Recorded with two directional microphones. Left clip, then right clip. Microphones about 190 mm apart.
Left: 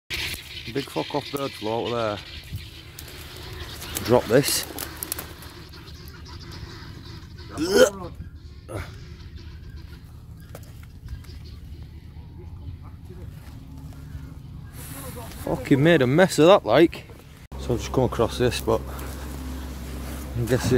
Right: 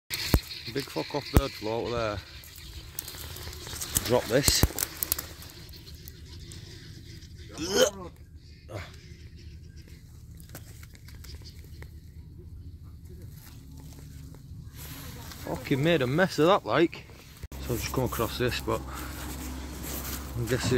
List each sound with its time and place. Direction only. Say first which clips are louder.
0.1 s speech: left 1 dB; centre (ahead or behind)
4.0 s speech: left 6 dB; 20° left (ahead or behind)
7.5 s speech: left 7 dB; 15° left (ahead or behind)
14.8 s speech: left 6 dB; 15° left (ahead or behind)
20.4 s speech: left 6 dB; 15° left (ahead or behind)